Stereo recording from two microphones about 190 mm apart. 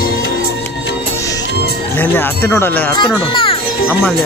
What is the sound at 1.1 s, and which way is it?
Music, 15° left (ahead or behind).